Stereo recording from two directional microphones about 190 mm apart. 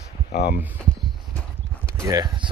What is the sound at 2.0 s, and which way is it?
Speech, 20° right (ahead or behind).